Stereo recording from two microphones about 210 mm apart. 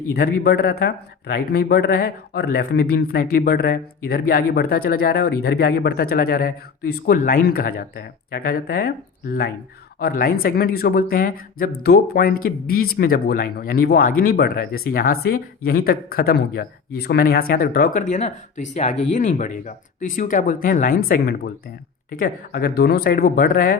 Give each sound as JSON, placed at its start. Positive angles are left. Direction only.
{"t": 0.1, "sound": "speech", "side_deg": 50}
{"t": 10.0, "sound": "speech", "side_deg": 45}